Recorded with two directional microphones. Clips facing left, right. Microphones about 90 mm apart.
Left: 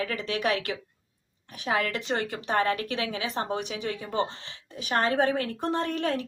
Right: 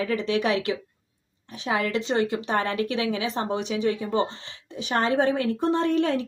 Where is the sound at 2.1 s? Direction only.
25° right (ahead or behind).